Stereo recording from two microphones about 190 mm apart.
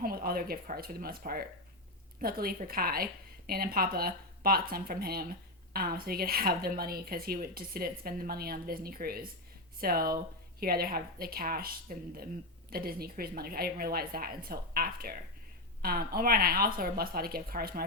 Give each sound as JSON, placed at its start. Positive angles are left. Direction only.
{"t": 0.0, "sound": "speech", "side_deg": -50}